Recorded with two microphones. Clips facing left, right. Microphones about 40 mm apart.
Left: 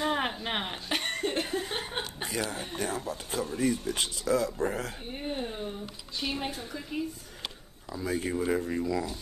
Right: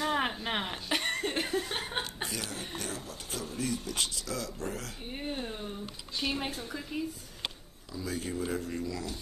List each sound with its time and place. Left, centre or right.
0.0 s a sound: centre
1.6 s chuckle: centre
2.8 s speech: left
5.1 s a woman's voice: centre
7.9 s speech: left